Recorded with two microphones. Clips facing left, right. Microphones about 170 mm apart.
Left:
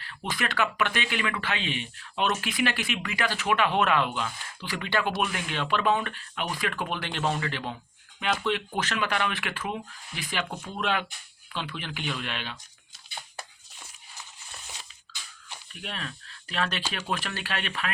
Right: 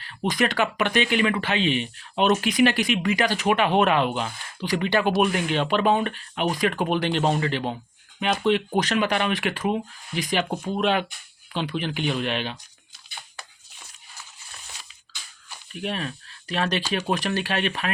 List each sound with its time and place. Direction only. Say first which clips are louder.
0.1 s speech: right 8 dB; 20° right (ahead or behind)
10.5 s speech: right 9 dB; 35° right (ahead or behind)
10.8 s speech: right 5 dB; 20° right (ahead or behind)
15.7 s speech: right 9 dB; 20° right (ahead or behind)